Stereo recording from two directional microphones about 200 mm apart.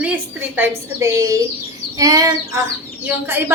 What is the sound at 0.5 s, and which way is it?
Speech, 10° right (ahead or behind).